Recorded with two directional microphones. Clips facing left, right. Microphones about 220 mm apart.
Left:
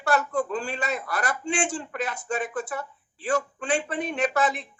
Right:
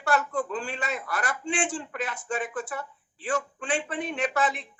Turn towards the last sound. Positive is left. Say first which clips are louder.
# left 3 dB
turn(degrees=40)  # may be behind; listen again after turning